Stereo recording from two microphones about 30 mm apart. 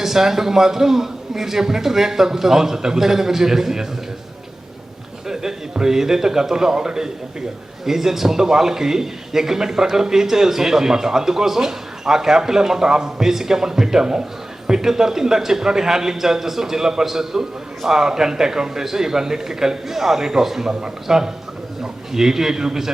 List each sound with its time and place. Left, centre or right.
0.0 s a man's voice: centre
5.3 s a sound: centre
5.7 s a man's voice: centre
7.9 s a man's voice: centre